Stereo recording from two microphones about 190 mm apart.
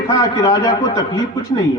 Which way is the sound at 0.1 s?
20° left (ahead or behind).